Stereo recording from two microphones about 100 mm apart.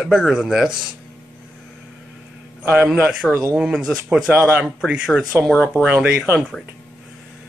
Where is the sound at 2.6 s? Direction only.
15° right (ahead or behind).